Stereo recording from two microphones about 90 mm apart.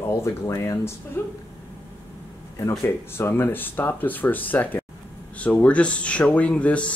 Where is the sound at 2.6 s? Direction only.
30° left (ahead or behind); by 6.9 s 15° left (ahead or behind).